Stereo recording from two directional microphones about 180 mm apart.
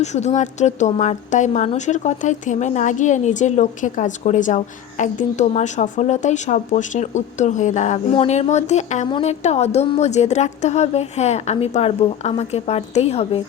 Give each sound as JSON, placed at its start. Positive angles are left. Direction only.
{"t": 0.0, "sound": "a woman's voice", "side_deg": 40}
{"t": 9.0, "sound": "a woman's voice", "side_deg": 25}
{"t": 9.4, "sound": "a woman's voice", "side_deg": 35}